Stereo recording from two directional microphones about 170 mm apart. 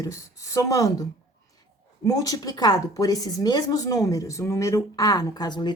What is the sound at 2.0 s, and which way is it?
A woman's voice, 20° left (ahead or behind).